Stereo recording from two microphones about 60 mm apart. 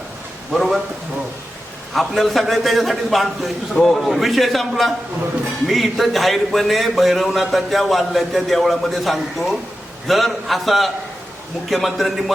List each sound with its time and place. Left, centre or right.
0.5 s speech: centre
1.9 s speech: centre